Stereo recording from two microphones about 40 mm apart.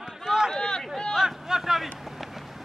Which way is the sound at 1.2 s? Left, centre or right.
Centre.